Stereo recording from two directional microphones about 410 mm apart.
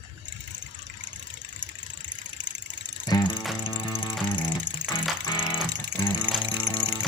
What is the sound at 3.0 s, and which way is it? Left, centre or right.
Music, centre.